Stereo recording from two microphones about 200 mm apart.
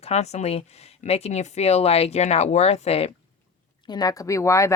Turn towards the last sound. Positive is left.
turn(degrees=15)  # may be behind; listen again after turning